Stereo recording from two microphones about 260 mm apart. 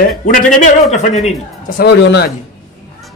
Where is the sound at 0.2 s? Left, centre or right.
Left.